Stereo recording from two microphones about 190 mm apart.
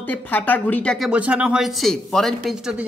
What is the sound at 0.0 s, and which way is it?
Speech, 10° left (ahead or behind).